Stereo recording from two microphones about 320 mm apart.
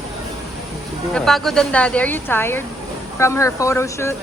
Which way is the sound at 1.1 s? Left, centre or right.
Centre.